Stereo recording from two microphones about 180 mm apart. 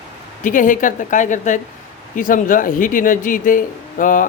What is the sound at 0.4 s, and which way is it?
Speech, 45° left (ahead or behind).